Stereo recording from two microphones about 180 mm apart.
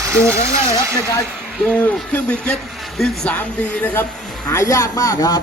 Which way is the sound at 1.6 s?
5° left (ahead or behind).